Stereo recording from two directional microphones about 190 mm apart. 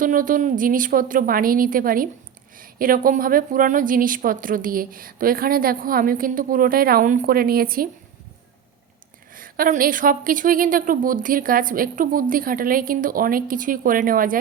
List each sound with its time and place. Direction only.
0.0 s a woman's voice: 45° right (ahead or behind)
9.3 s a woman's voice: 45° right (ahead or behind)